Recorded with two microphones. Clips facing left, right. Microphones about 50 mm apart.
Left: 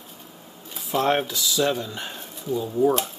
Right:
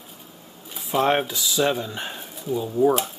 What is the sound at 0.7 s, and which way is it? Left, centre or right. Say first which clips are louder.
Speech: right 1 dB; centre.